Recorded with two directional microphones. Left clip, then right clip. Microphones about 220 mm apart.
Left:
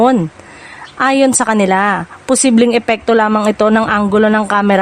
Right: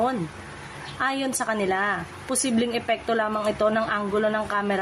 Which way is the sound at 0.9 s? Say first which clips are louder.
Left 15 dB; 50° left (ahead or behind).